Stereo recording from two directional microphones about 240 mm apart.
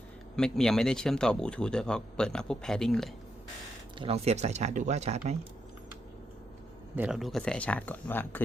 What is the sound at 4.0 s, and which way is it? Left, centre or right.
Speech, right.